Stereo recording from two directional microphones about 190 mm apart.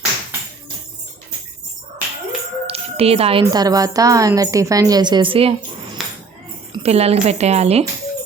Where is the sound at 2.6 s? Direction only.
30° right (ahead or behind).